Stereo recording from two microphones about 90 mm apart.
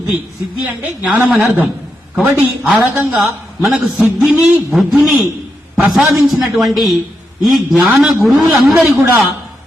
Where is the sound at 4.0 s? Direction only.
20° right (ahead or behind).